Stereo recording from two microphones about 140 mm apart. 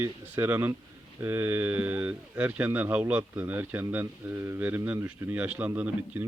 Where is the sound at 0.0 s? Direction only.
15° right (ahead or behind).